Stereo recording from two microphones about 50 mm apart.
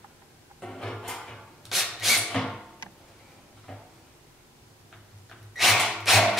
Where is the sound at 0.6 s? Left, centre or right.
Centre.